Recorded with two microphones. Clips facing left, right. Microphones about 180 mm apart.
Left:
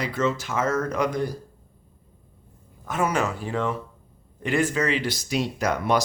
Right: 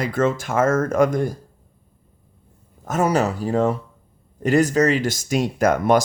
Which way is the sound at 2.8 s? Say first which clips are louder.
Right 5 dB; 40° right (ahead or behind).